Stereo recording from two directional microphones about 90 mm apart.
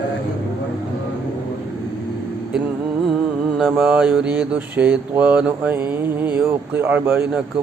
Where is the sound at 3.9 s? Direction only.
10° right (ahead or behind).